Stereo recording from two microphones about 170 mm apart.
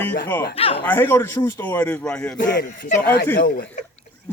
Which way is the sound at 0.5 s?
35° left (ahead or behind).